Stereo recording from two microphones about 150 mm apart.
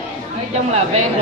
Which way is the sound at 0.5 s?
45° right (ahead or behind).